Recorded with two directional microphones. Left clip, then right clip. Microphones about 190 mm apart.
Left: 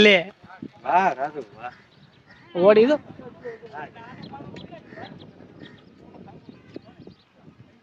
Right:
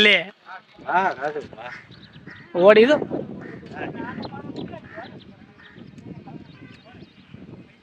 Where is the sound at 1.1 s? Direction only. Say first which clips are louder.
Right 1 dB; 55° left (ahead or behind).